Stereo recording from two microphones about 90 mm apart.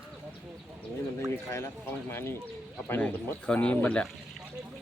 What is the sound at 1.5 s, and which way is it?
Speech, 25° left (ahead or behind).